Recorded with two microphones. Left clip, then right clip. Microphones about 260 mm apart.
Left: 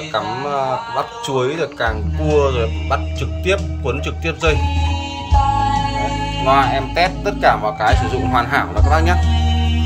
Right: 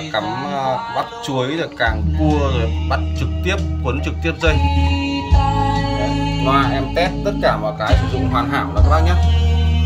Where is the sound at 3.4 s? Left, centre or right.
Centre.